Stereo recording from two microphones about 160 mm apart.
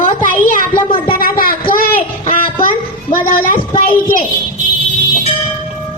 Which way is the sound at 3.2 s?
60° left (ahead or behind).